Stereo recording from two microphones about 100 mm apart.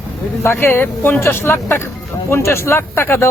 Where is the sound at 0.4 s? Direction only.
25° left (ahead or behind).